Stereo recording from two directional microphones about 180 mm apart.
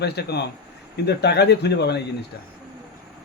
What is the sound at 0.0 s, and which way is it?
Speech, 65° left (ahead or behind).